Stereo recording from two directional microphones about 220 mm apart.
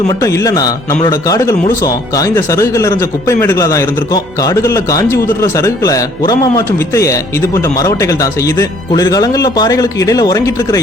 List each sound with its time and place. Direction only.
0.1 s a man's voice: 15° left (ahead or behind)